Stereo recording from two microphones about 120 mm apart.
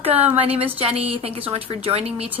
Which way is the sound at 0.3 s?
50° right (ahead or behind).